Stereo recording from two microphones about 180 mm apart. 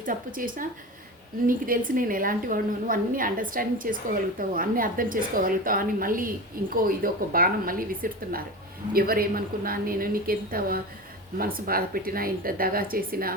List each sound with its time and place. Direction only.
0.0 s a woman's voice: 50° right (ahead or behind)